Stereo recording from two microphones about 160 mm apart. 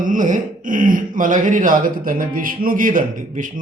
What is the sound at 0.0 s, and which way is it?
Speech, 55° right (ahead or behind).